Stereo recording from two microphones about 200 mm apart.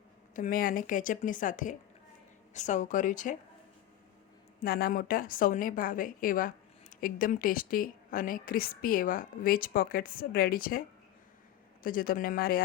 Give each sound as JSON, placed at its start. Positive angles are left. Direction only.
{"t": 0.3, "sound": "a woman's voice", "side_deg": 45}
{"t": 4.6, "sound": "a woman's voice", "side_deg": 45}